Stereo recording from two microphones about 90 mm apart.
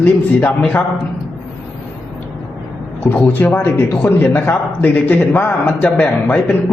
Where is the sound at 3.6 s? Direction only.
20° left (ahead or behind).